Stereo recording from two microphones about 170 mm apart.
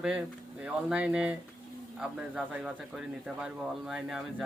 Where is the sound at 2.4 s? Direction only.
Centre (ahead or behind).